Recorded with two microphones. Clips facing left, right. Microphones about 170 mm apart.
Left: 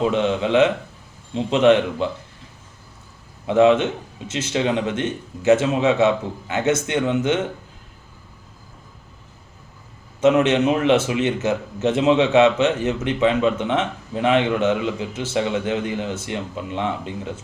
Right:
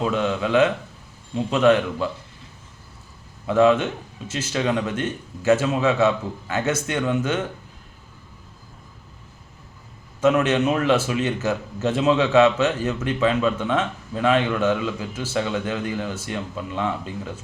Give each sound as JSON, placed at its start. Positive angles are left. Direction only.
{"t": 0.0, "sound": "a man's voice", "side_deg": 20}
{"t": 3.4, "sound": "a man's voice", "side_deg": 20}
{"t": 10.2, "sound": "a man's voice", "side_deg": 20}